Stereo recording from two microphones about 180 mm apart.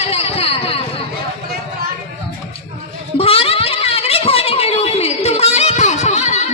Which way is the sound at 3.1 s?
30° left (ahead or behind).